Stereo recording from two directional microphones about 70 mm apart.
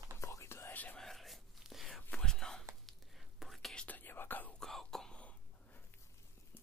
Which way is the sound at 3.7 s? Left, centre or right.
Left.